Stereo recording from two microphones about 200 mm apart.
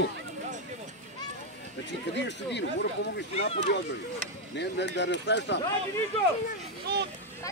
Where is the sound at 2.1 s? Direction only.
60° left (ahead or behind).